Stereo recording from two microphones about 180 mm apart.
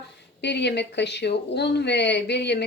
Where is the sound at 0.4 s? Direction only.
70° left (ahead or behind).